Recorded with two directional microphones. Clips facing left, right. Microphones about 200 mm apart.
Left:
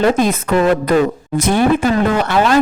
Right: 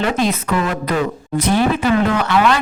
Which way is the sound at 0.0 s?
45° left (ahead or behind).